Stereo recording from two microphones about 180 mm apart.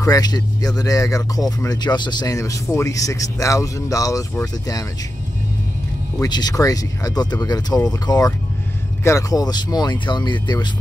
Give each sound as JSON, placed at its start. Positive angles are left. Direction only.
{"t": 0.0, "sound": "speech", "side_deg": 20}
{"t": 6.2, "sound": "speech", "side_deg": 20}